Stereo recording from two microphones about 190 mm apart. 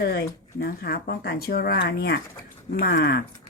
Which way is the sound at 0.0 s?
55° left (ahead or behind).